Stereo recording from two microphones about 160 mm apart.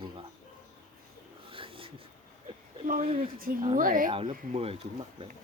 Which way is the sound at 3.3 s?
65° right (ahead or behind).